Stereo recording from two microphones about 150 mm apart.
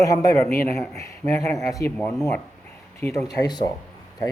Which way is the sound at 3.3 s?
25° left (ahead or behind).